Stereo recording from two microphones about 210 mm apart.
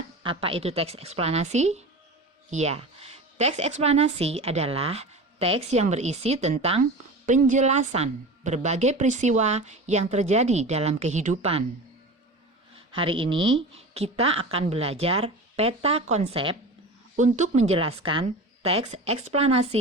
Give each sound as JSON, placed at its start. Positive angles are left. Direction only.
{"t": 0.2, "sound": "a woman's voice", "side_deg": -25}
{"t": 12.9, "sound": "a woman's voice", "side_deg": -25}